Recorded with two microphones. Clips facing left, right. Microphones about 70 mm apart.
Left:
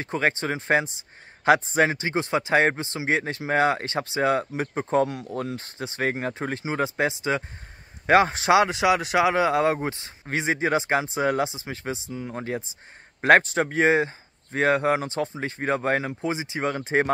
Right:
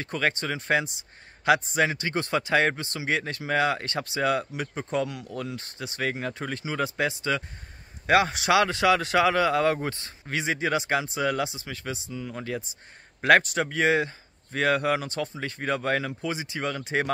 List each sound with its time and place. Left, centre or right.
0.0 s speech: left